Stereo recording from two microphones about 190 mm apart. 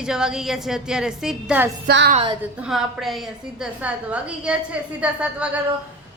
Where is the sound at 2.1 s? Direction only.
35° right (ahead or behind).